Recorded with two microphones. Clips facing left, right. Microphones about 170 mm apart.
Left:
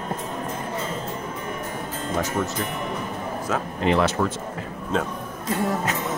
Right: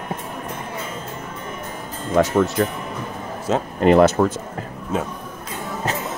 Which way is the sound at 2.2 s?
60° right (ahead or behind).